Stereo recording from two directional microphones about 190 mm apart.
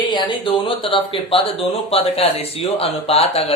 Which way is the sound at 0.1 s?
25° left (ahead or behind).